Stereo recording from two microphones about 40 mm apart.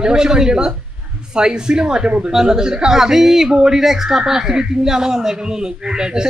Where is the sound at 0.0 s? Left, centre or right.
Centre.